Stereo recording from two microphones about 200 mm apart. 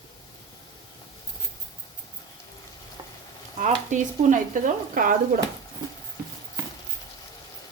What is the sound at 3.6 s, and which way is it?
Speech, 35° right (ahead or behind).